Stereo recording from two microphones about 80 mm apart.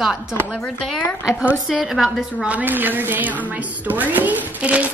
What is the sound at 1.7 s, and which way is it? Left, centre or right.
Speech, centre.